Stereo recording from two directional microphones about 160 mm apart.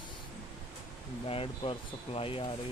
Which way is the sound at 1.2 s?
35° left (ahead or behind).